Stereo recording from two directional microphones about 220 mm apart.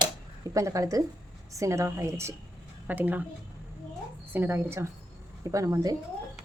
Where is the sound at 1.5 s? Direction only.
15° right (ahead or behind).